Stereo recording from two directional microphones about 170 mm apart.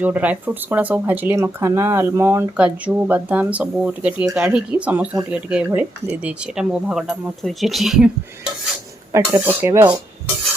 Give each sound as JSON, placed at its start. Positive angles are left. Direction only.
{"t": 0.0, "sound": "speech", "side_deg": -10}
{"t": 9.1, "sound": "speech", "side_deg": -15}